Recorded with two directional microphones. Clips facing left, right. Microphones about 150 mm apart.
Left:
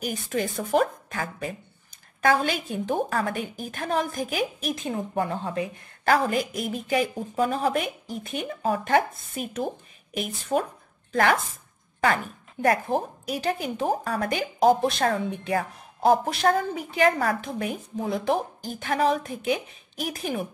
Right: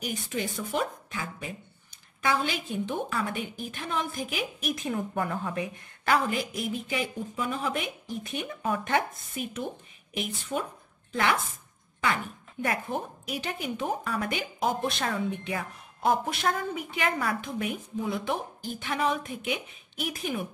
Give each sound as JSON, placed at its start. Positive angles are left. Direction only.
{"t": 0.0, "sound": "a woman's voice", "side_deg": 45}
{"t": 12.6, "sound": "a woman's voice", "side_deg": 40}